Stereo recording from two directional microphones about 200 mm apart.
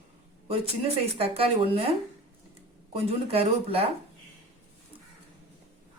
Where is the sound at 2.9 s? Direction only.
30° right (ahead or behind).